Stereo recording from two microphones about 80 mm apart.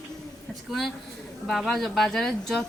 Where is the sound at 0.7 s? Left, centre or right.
Centre.